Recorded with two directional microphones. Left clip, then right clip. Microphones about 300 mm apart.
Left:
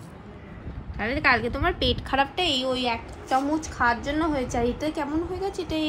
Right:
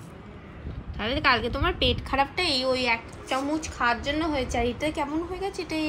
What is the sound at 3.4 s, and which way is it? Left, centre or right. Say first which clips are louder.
Speech: left 4 dB; centre.